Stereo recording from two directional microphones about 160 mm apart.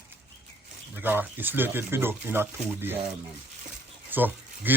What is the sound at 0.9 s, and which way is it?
A man's voice, 10° right (ahead or behind).